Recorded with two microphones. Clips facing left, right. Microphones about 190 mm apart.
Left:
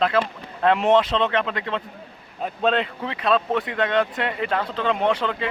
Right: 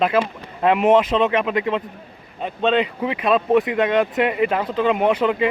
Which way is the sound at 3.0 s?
15° right (ahead or behind).